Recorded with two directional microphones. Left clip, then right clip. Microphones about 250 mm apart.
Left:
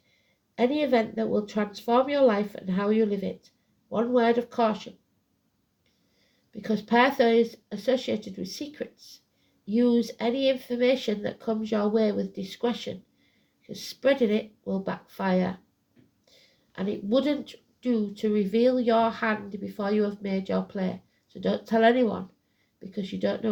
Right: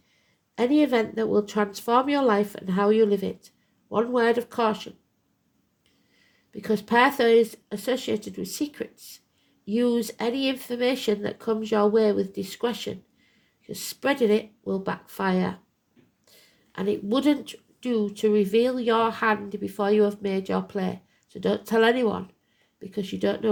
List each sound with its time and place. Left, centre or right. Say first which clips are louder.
0.5 s speech: right 2 dB; right
6.5 s a woman's voice: right 2 dB; right